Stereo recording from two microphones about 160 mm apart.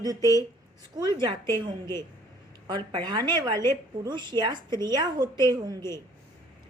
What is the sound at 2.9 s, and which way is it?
A woman's voice, 30° right (ahead or behind).